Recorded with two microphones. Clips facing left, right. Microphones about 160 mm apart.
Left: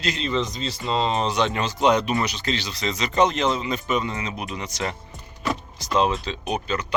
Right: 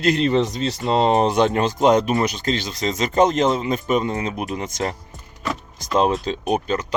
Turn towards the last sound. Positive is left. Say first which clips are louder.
# right 5 dB
turn(degrees=-45)  # may be behind; listen again after turning